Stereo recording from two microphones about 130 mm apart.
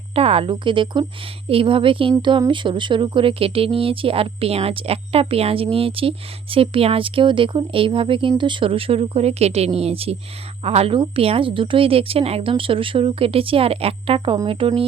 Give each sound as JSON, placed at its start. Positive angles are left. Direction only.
{"t": 0.1, "sound": "speech", "side_deg": -45}